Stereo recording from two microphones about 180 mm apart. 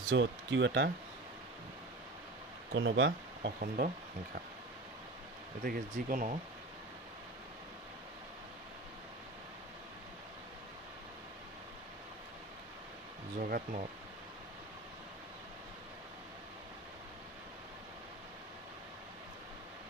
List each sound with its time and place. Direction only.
0.1 s speech: 80° right
2.7 s speech: 90° right; by 3.8 s 60° right (ahead or behind)
5.6 s speech: 50° right (ahead or behind)
13.4 s speech: 50° right (ahead or behind)